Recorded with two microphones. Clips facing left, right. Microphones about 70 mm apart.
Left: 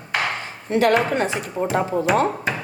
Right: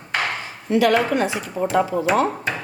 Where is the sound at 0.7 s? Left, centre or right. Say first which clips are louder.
Even; left.